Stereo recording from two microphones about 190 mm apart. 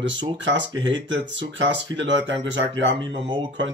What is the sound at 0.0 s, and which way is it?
Speech, 75° right (ahead or behind).